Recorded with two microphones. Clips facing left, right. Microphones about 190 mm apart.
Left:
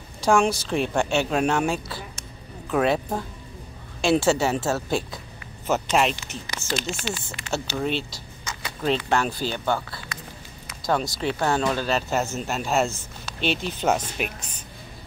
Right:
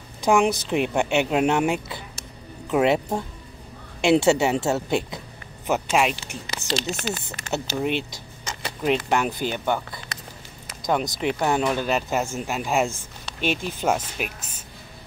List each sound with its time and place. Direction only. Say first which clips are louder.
0.2 s a woman's voice: right 1 dB; 15° right (ahead or behind)
5.7 s a woman's voice: even; 10° right (ahead or behind)
6.4 s speech: right 2 dB; 25° right (ahead or behind)
7.0 s speech: right 2 dB; 60° right (ahead or behind)
7.5 s a woman's voice: right 1 dB; 15° right (ahead or behind)